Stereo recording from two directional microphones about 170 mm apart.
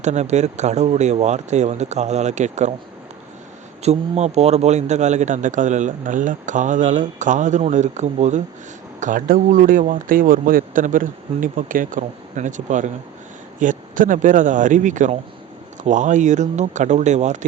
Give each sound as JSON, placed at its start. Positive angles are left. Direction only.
{"t": 0.0, "sound": "speech", "side_deg": -40}
{"t": 3.8, "sound": "speech", "side_deg": -40}